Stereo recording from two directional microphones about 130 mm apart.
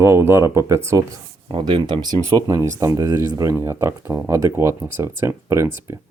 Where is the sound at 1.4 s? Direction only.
35° right (ahead or behind).